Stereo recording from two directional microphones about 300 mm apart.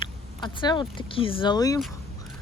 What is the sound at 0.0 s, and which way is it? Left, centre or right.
Speech, centre.